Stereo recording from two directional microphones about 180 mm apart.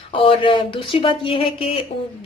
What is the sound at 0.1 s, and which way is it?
A woman's voice, 30° left (ahead or behind).